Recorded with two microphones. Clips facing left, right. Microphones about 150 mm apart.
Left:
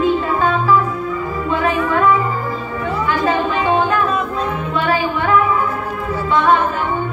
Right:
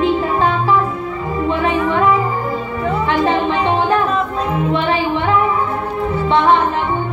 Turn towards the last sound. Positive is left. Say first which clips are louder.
# right 2 dB
turn(degrees=-25)  # may be behind; listen again after turning